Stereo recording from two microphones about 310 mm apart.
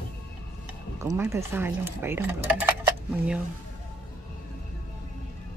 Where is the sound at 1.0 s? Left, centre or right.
Centre.